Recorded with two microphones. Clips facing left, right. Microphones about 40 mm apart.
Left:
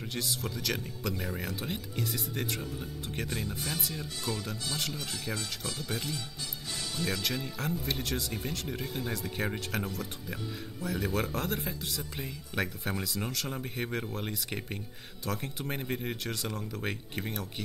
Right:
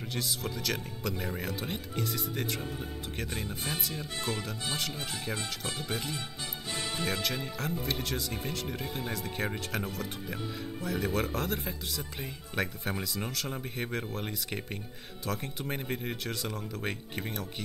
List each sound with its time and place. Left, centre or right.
0.1 s speech: centre
3.4 s speech: centre
4.2 s speech: right
6.7 s music: right
7.8 s speech: centre